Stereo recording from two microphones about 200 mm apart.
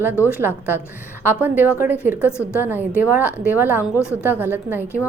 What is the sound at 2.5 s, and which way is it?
A woman's voice, 10° right (ahead or behind).